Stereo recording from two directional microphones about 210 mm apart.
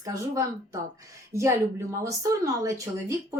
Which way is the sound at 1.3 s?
15° right (ahead or behind).